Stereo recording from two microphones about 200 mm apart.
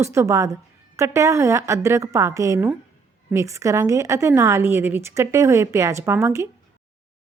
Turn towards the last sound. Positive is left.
turn(degrees=-15)  # may be behind; listen again after turning